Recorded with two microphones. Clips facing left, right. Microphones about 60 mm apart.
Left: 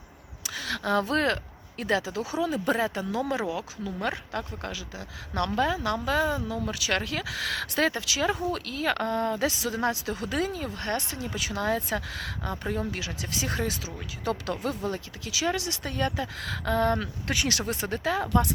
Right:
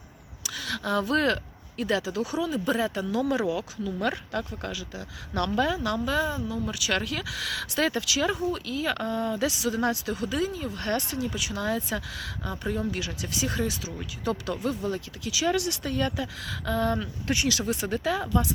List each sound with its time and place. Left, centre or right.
0.4 s a sound: left
1.8 s speech: left
8.5 s speech: left
10.7 s speech: left
12.9 s speech: left
18.3 s speech: left